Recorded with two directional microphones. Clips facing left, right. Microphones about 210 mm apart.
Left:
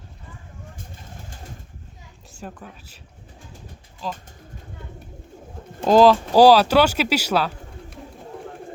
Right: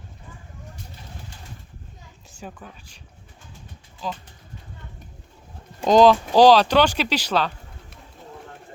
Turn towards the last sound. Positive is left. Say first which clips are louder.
# left 4 dB
turn(degrees=5)  # may be behind; listen again after turning